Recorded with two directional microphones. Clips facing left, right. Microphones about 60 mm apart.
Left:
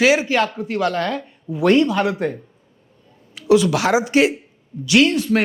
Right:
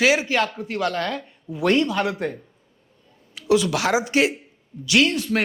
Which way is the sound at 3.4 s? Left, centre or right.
Left.